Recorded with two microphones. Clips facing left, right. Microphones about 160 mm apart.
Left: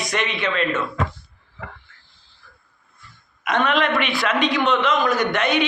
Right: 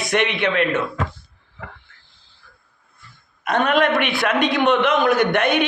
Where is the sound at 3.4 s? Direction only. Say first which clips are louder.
Right 2 dB; 40° right (ahead or behind).